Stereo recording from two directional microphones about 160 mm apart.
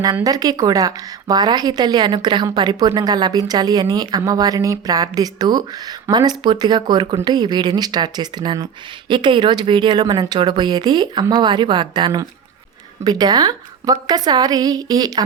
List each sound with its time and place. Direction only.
0.0 s a woman's voice: 20° right (ahead or behind)